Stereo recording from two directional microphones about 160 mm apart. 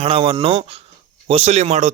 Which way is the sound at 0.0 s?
35° right (ahead or behind).